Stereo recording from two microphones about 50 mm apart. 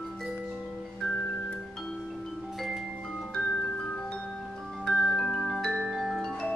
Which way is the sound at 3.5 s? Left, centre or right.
Centre.